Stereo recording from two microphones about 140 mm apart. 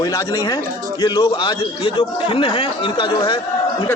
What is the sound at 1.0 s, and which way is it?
Speech, 30° left (ahead or behind).